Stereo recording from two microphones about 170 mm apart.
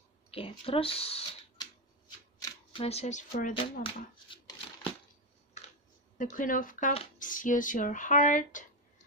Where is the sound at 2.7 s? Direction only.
35° left (ahead or behind).